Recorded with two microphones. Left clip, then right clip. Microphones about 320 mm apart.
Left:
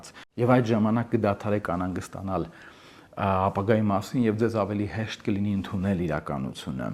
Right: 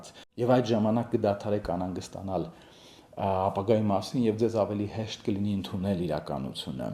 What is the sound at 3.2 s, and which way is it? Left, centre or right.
Speech, left.